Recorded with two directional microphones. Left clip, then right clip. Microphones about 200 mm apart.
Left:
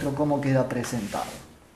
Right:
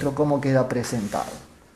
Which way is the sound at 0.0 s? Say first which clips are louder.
Right 3 dB; 50° right (ahead or behind).